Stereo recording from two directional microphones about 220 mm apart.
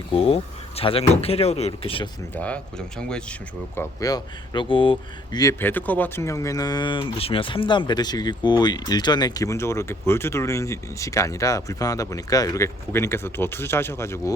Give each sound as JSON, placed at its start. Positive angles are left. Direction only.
{"t": 0.1, "sound": "speech", "side_deg": 25}
{"t": 2.3, "sound": "speech", "side_deg": 5}
{"t": 3.8, "sound": "speech", "side_deg": 15}